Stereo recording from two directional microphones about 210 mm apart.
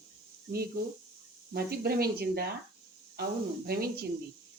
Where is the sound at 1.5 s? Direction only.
45° right (ahead or behind).